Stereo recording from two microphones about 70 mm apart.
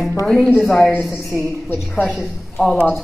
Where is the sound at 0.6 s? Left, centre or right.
Centre.